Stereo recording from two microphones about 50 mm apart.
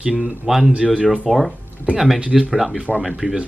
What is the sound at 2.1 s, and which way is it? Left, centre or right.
Speech, right.